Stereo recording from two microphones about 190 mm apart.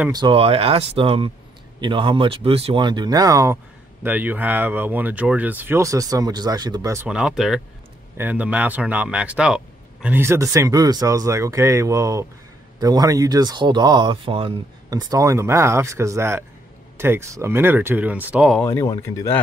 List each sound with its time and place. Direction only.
0.1 s speech: 25° right (ahead or behind)
7.1 s speech: 5° right (ahead or behind)
18.6 s speech: 15° left (ahead or behind)